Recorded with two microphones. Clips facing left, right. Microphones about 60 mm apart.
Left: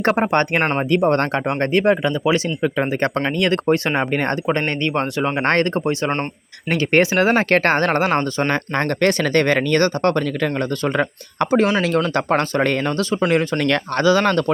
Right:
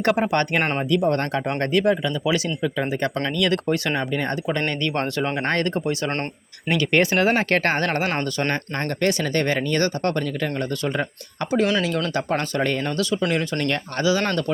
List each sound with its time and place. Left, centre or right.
0.0 s speech: left
0.8 s speech: left
1.5 s speech: left
4.1 s speech: left
4.4 s speech: left
4.9 s speech: left
5.4 s speech: left
8.5 s speech: left
13.0 s speech: left
13.6 s speech: left
14.0 s speech: left